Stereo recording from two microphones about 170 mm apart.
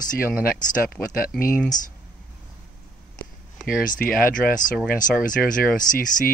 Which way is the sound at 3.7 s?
55° left (ahead or behind).